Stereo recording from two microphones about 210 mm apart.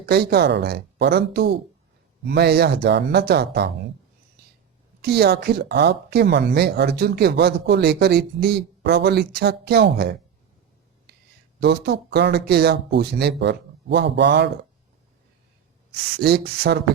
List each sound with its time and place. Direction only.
0.0 s speech: 50° right (ahead or behind)
5.0 s speech: 50° right (ahead or behind)
11.1 s a sound: 50° right (ahead or behind)
11.6 s speech: 50° right (ahead or behind)
16.2 s speech: 50° right (ahead or behind)